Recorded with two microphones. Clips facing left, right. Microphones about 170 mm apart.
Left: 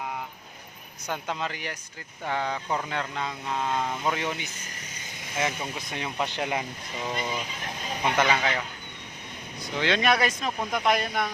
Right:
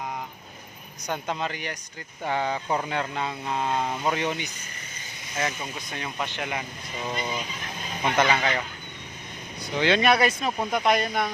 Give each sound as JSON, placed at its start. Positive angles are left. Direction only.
{"t": 1.3, "sound": "speech", "side_deg": 0}
{"t": 2.3, "sound": "speech", "side_deg": -5}
{"t": 4.0, "sound": "speech", "side_deg": 0}
{"t": 5.9, "sound": "speech", "side_deg": 20}
{"t": 6.2, "sound": "speech", "side_deg": 35}
{"t": 8.1, "sound": "speech", "side_deg": -10}
{"t": 9.7, "sound": "speech", "side_deg": -5}